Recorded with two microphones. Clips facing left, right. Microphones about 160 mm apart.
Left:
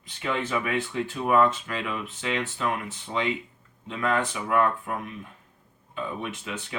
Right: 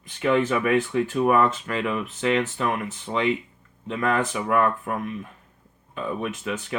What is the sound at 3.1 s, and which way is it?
Speech, 40° right (ahead or behind).